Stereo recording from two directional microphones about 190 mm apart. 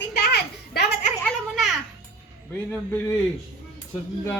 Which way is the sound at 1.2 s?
Centre (ahead or behind).